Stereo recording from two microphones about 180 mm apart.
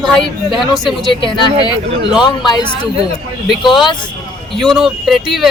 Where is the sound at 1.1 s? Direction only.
25° left (ahead or behind).